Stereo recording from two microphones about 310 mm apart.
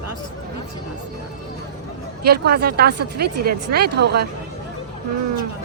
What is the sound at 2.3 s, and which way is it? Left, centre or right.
Speech, right.